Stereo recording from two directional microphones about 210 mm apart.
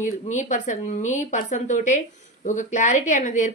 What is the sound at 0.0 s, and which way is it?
Speech, 35° left (ahead or behind).